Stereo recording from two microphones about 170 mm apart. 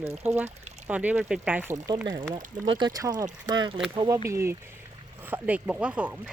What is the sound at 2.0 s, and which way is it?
Speech, 25° right (ahead or behind).